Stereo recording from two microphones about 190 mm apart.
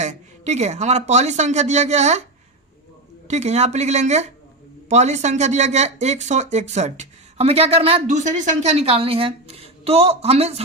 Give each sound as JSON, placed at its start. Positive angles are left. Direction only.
{"t": 0.0, "sound": "speech", "side_deg": -35}
{"t": 3.2, "sound": "speech", "side_deg": -35}